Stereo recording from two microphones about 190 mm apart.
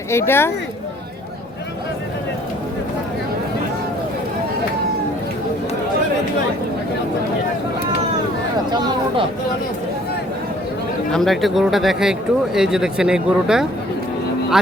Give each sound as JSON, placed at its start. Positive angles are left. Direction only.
{"t": 0.1, "sound": "speech", "side_deg": 15}
{"t": 8.7, "sound": "speech", "side_deg": -25}
{"t": 11.1, "sound": "speech", "side_deg": 0}